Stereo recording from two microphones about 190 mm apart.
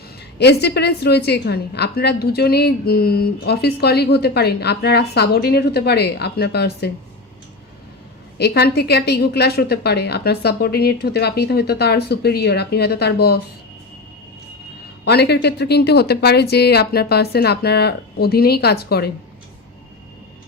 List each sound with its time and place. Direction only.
0.3 s a woman's voice: 60° left (ahead or behind)
8.4 s a woman's voice: 60° left (ahead or behind)
15.0 s a woman's voice: 60° left (ahead or behind)